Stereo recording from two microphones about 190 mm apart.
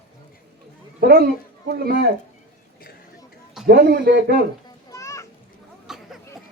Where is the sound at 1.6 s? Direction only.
55° right (ahead or behind).